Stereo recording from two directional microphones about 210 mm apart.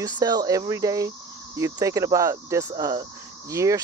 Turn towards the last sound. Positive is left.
turn(degrees=-15)  # may be behind; listen again after turning